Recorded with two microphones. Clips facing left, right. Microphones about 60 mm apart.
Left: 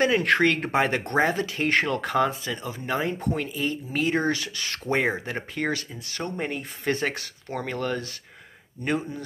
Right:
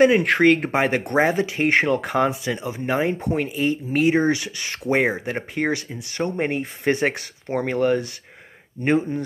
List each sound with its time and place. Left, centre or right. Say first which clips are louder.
0.0 s speech: right 5 dB; centre
2.8 s speech: right 4 dB; right; by 5.4 s centre
5.5 s speech: right 4 dB; right
6.9 s speech: right 5 dB; centre
8.8 s speech: right 7 dB; right